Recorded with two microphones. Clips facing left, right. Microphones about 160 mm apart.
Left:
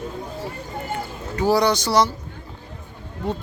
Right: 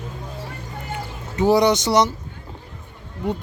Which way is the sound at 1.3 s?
20° right (ahead or behind).